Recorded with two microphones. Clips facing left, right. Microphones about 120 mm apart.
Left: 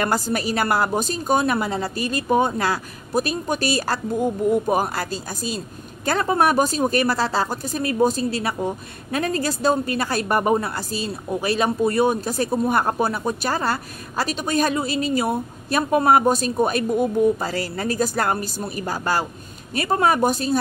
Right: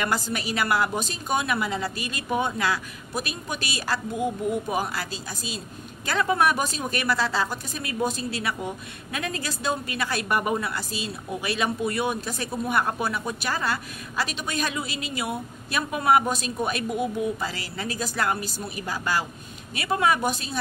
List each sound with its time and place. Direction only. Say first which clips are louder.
0.0 s a woman's voice: left 5 dB; 40° left (ahead or behind)